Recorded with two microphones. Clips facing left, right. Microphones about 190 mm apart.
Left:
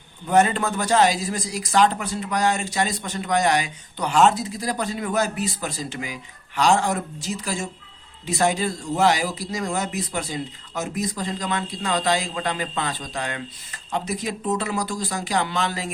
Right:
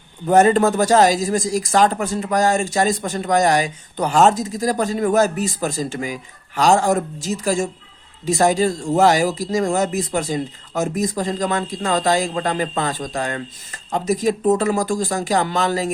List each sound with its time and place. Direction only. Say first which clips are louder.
0.3 s speech: right 6 dB; 45° right (ahead or behind)